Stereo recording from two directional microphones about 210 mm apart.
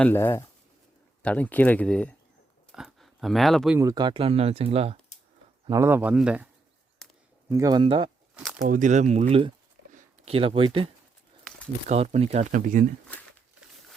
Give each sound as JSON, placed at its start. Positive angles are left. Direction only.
{"t": 0.0, "sound": "speech", "side_deg": 10}
{"t": 3.8, "sound": "speech", "side_deg": -20}
{"t": 5.6, "sound": "speech", "side_deg": -15}
{"t": 7.0, "sound": "a sound", "side_deg": 0}
{"t": 7.5, "sound": "speech", "side_deg": -15}
{"t": 8.6, "sound": "speech", "side_deg": -40}
{"t": 9.9, "sound": "a sound", "side_deg": -30}
{"t": 11.9, "sound": "speech", "side_deg": -35}